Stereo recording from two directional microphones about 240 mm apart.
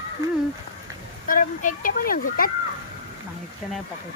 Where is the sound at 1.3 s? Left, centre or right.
Left.